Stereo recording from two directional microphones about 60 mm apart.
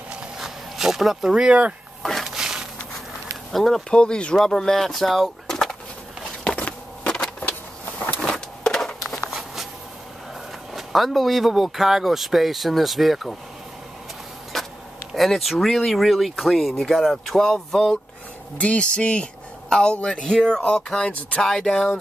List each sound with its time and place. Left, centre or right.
0.1 s a sound: centre
1.3 s speech: centre
2.2 s a sound: centre
3.5 s speech: centre
4.0 s speech: centre
5.5 s a sound: centre
7.1 s vehicle: centre
8.2 s power windows: centre
10.7 s speech: centre
14.5 s a sound: centre
15.1 s speech: centre
21.4 s speech: centre